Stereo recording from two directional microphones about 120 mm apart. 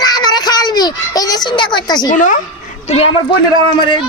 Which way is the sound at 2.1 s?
90° left.